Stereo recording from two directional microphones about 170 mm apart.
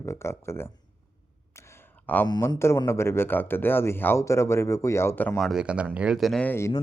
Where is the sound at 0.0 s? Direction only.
15° left (ahead or behind).